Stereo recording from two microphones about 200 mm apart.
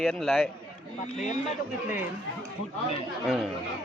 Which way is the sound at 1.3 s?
35° left (ahead or behind).